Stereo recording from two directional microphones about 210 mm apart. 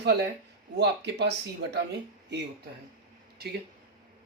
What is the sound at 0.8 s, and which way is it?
Speech, 55° right (ahead or behind).